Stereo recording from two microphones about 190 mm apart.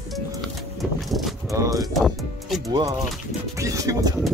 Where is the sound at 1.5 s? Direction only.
15° right (ahead or behind).